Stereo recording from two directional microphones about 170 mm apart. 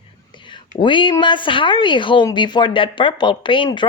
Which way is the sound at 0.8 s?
30° left (ahead or behind).